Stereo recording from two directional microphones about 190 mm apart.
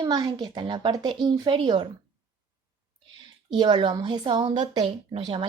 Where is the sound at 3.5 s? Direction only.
25° right (ahead or behind).